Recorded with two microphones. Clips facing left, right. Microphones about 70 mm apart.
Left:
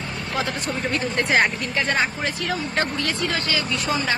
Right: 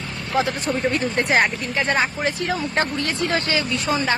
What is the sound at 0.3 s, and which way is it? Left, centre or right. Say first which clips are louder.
Speech: right 5 dB; right.